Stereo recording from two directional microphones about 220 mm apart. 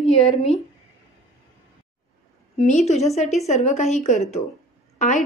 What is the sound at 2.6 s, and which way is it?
A woman's voice, 30° left (ahead or behind).